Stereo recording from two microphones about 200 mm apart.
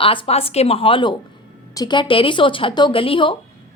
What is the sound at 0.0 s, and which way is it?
A woman's voice, 25° left (ahead or behind).